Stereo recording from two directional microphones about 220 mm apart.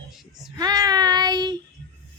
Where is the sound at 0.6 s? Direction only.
15° right (ahead or behind).